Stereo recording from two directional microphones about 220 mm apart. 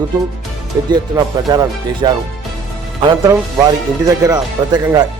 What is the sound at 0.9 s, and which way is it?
Speech, 20° right (ahead or behind).